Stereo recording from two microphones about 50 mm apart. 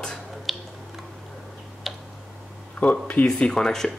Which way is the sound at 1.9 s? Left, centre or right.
Centre.